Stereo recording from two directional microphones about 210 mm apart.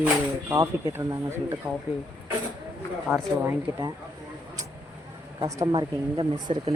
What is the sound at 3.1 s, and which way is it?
Speech, 10° right (ahead or behind).